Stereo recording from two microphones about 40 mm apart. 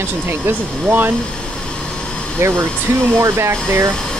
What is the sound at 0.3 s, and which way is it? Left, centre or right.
Speech, right.